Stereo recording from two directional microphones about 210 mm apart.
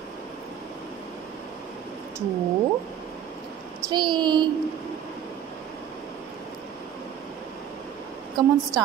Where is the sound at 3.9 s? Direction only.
20° right (ahead or behind).